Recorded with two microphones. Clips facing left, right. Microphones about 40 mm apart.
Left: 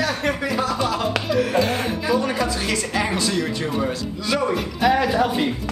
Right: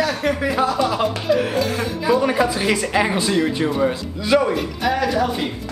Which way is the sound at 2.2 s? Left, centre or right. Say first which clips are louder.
Right 4 dB; right.